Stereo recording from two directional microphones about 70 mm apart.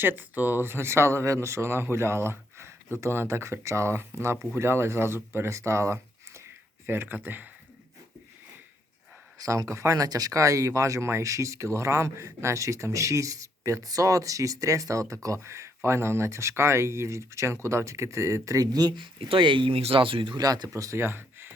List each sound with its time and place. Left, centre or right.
0.0 s speech: right
9.4 s speech: right
20.3 s speech: right
21.0 s a sound: right